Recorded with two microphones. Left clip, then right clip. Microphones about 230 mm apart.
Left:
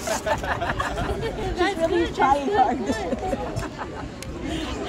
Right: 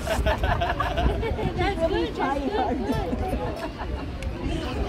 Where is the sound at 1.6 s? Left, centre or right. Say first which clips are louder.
Left 3 dB; left.